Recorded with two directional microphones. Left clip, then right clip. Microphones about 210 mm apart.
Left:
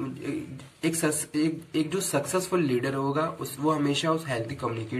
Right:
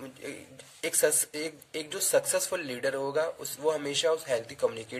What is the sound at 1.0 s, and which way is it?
Speech, 45° right (ahead or behind).